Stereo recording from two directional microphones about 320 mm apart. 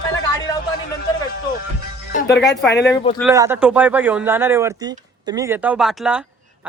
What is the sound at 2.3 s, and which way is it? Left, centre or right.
Speech, left.